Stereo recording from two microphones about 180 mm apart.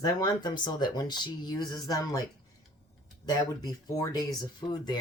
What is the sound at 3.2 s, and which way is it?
Speech, 20° left (ahead or behind).